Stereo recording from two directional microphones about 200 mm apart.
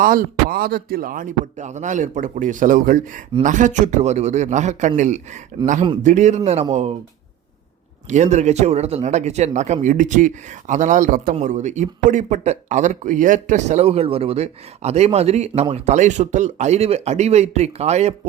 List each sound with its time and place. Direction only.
0.0 s a man's voice: 45° right (ahead or behind)
8.1 s a man's voice: 35° right (ahead or behind)